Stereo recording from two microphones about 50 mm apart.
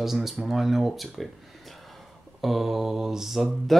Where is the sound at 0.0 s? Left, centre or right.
Centre.